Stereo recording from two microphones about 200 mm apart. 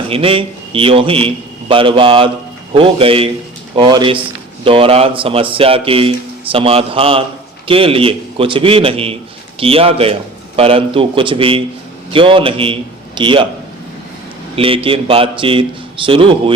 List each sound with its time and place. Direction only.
0.1 s speech: 25° right (ahead or behind)
14.5 s speech: 25° right (ahead or behind)